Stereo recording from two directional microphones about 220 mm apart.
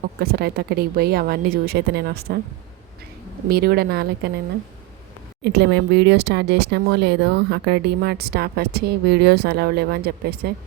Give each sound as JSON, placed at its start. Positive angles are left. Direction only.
{"t": 0.2, "sound": "speech", "side_deg": -45}
{"t": 3.5, "sound": "speech", "side_deg": -45}
{"t": 5.4, "sound": "speech", "side_deg": -50}